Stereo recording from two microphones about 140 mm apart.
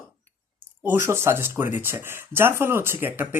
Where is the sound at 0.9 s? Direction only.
20° right (ahead or behind).